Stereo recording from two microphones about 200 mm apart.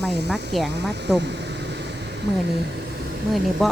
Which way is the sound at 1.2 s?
60° right (ahead or behind).